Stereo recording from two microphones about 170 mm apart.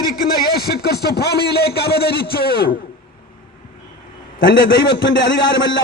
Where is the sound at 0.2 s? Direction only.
60° left (ahead or behind).